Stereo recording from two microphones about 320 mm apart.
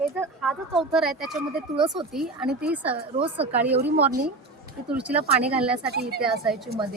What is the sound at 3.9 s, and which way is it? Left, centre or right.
Speech, right.